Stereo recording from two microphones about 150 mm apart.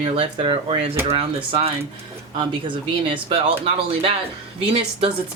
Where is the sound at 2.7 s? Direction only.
35° right (ahead or behind).